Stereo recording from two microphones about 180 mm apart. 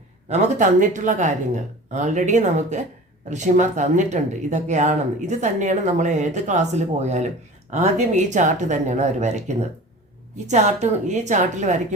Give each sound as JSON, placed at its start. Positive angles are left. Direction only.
{"t": 0.3, "sound": "speech", "side_deg": -45}